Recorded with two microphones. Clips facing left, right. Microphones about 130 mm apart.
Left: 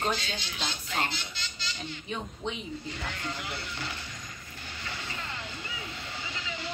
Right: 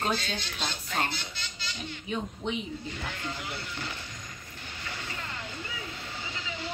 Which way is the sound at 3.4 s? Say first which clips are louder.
Even; 45° right (ahead or behind).